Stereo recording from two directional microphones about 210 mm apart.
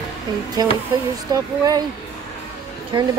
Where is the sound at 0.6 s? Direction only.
20° right (ahead or behind).